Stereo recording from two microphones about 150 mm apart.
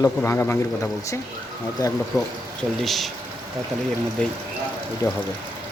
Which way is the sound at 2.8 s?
Centre (ahead or behind).